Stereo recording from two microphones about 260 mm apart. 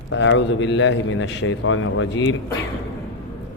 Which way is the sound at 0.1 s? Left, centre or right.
Left.